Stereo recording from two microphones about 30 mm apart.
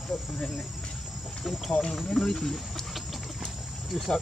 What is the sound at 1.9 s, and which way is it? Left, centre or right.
Speech, centre.